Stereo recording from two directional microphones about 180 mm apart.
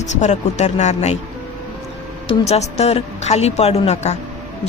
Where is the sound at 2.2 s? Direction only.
35° left (ahead or behind).